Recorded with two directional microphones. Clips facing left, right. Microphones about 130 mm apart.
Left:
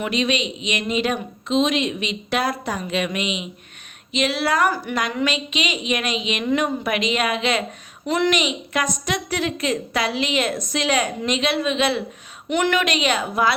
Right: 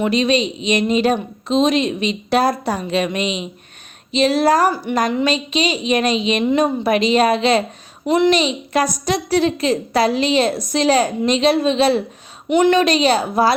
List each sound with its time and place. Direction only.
0.0 s speech: 35° right (ahead or behind)
6.4 s a woman's voice: 20° right (ahead or behind)
6.8 s speech: 35° right (ahead or behind)
8.0 s a woman's voice: 20° right (ahead or behind)
8.3 s speech: 35° right (ahead or behind)
12.5 s a woman's voice: 20° right (ahead or behind)
12.8 s speech: 35° right (ahead or behind)